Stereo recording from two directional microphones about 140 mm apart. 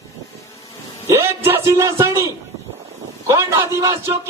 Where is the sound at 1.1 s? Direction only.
20° right (ahead or behind).